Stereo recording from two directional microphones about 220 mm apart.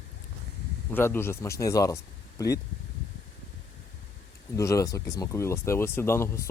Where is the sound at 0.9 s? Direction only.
10° left (ahead or behind).